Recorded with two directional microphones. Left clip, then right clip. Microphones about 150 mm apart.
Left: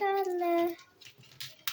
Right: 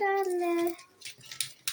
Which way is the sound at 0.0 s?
10° left (ahead or behind).